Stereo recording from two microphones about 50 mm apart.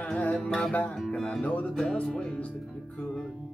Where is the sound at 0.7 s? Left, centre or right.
Left.